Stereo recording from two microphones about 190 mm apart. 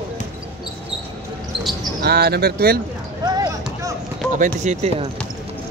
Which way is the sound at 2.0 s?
55° right (ahead or behind).